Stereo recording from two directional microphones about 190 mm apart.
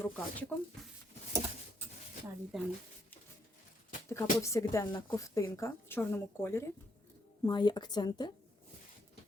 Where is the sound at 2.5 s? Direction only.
Centre (ahead or behind).